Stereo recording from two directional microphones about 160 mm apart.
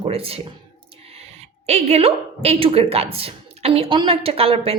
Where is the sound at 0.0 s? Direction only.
35° right (ahead or behind).